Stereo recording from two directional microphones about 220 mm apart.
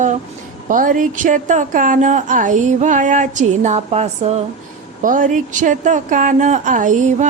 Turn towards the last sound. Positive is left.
turn(degrees=-35)  # may be behind; listen again after turning